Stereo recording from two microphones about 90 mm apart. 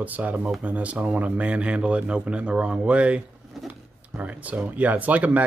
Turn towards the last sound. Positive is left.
turn(degrees=-15)  # may be behind; listen again after turning